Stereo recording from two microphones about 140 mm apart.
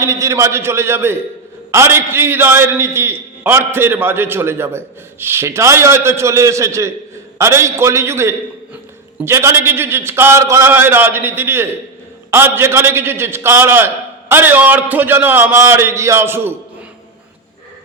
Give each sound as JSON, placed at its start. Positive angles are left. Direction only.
{"t": 0.0, "sound": "a man's voice", "side_deg": -20}